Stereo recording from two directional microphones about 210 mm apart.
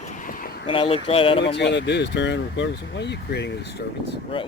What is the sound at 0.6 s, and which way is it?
Speech, 25° left (ahead or behind).